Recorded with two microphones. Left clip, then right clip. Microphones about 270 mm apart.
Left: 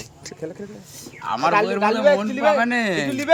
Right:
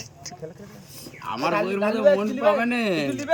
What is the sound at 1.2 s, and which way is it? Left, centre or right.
Speech, centre.